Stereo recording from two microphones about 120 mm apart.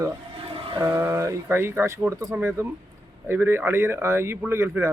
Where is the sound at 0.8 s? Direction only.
20° right (ahead or behind).